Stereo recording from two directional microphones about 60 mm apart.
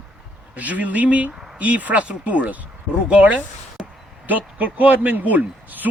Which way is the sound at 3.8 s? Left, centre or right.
Centre.